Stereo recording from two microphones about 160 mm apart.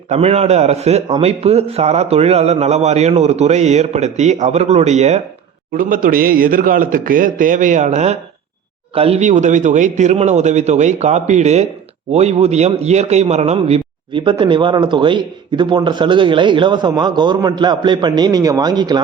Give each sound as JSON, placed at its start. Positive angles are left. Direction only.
{"t": 0.1, "sound": "a man's voice", "side_deg": -40}
{"t": 5.7, "sound": "a man's voice", "side_deg": -60}